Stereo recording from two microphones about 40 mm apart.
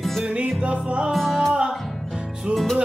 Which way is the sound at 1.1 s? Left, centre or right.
Centre.